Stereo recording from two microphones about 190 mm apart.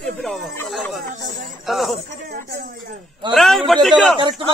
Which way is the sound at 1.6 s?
Centre (ahead or behind).